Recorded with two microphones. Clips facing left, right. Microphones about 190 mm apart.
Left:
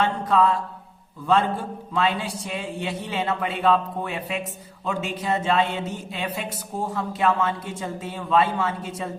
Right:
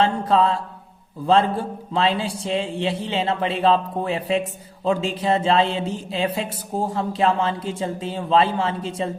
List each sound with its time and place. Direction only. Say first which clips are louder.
0.0 s speech: right 2 dB; 30° right (ahead or behind)